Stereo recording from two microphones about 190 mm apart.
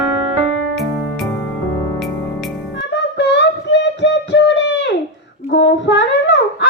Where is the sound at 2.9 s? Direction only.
65° left (ahead or behind).